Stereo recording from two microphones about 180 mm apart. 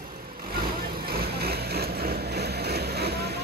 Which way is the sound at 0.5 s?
60° right (ahead or behind).